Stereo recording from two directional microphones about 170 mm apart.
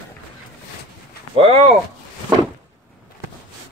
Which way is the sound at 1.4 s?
35° right (ahead or behind).